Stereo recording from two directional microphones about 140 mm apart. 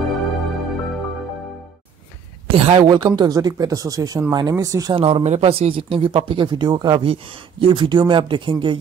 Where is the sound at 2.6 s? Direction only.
45° right (ahead or behind).